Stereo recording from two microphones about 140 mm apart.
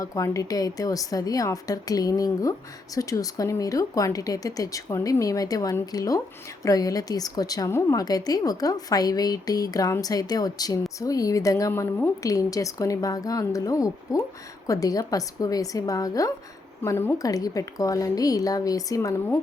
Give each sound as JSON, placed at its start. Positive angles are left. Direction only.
{"t": 0.0, "sound": "a woman's voice", "side_deg": 25}